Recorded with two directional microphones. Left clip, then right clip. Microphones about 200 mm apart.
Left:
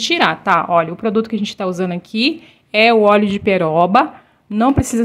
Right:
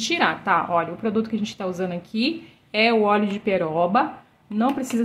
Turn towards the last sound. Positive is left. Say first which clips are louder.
# left 8 dB
turn(degrees=40)  # may be behind; listen again after turning